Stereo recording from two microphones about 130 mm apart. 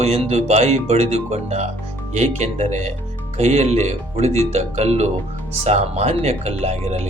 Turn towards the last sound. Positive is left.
turn(degrees=-55)  # may be behind; listen again after turning